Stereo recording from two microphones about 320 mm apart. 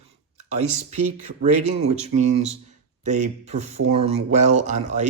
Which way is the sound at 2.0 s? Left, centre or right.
Right.